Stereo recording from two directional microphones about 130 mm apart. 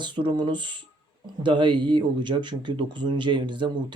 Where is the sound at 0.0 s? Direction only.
40° right (ahead or behind).